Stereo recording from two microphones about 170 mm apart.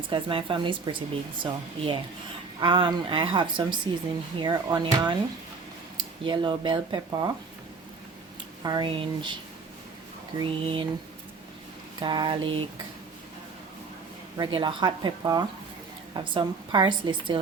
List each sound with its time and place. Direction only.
0.1 s speech: 30° right (ahead or behind)
6.2 s speech: 30° right (ahead or behind)
8.6 s speech: 25° right (ahead or behind)
10.4 s speech: 30° right (ahead or behind)
11.9 s speech: 25° right (ahead or behind)
14.3 s speech: 25° right (ahead or behind)